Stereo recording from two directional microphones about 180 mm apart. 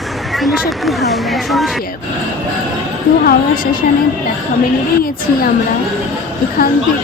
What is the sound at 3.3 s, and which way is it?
Speech, 50° left (ahead or behind).